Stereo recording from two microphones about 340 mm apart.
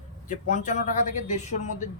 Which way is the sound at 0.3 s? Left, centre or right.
Left.